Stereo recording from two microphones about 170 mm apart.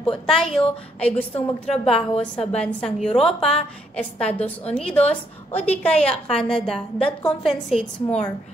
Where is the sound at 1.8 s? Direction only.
35° left (ahead or behind).